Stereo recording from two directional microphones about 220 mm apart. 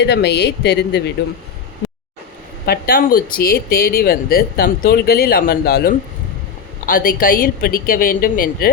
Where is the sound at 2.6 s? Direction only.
40° left (ahead or behind).